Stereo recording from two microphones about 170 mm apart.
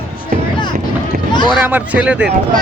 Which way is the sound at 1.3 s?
25° left (ahead or behind).